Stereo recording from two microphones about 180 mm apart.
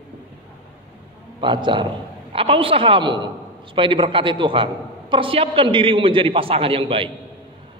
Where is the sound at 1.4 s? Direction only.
25° right (ahead or behind).